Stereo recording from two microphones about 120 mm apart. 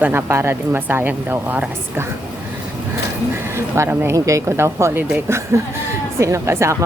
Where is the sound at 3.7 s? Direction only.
20° right (ahead or behind).